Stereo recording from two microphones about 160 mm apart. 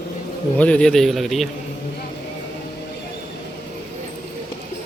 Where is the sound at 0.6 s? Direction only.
5° left (ahead or behind).